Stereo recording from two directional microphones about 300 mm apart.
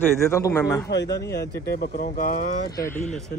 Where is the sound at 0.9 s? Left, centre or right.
Left.